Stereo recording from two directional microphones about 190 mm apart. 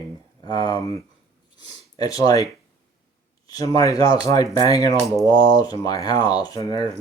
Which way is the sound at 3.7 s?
20° left (ahead or behind).